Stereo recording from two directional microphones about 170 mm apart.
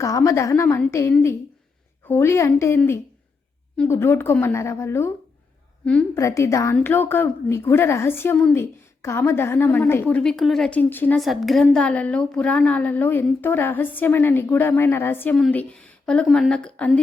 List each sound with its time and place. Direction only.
0.0 s a woman's voice: 20° left (ahead or behind)
6.1 s a woman's voice: 15° left (ahead or behind)
11.2 s a woman's voice: centre (ahead or behind)